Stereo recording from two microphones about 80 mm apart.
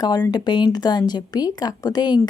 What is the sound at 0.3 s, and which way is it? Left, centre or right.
Speech, left.